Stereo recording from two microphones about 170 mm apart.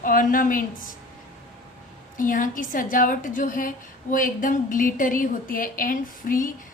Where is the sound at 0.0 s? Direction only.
55° left (ahead or behind).